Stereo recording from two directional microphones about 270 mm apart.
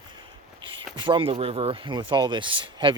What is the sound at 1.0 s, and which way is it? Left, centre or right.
Speech, centre.